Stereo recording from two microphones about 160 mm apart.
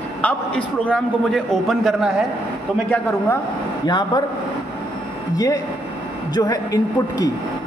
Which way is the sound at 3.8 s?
25° left (ahead or behind).